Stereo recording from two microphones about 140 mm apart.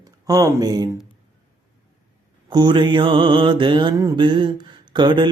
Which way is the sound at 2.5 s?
35° right (ahead or behind).